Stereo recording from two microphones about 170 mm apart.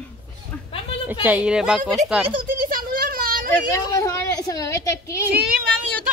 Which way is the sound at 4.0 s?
20° left (ahead or behind).